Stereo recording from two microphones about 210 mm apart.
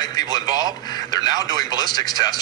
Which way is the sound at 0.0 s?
20° left (ahead or behind).